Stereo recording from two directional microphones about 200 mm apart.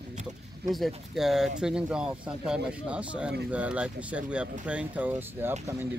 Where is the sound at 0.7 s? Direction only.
Centre (ahead or behind).